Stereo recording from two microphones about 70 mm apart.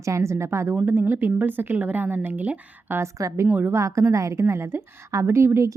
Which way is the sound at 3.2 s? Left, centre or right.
Right.